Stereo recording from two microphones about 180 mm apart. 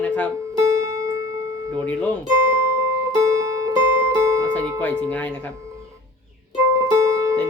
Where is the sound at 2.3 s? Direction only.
15° right (ahead or behind).